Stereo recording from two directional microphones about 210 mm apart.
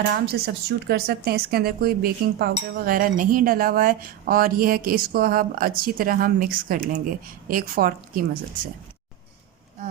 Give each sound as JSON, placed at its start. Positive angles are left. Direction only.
{"t": 0.4, "sound": "a woman's voice", "side_deg": -45}